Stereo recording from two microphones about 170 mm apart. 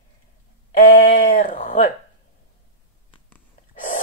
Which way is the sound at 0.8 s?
55° left (ahead or behind).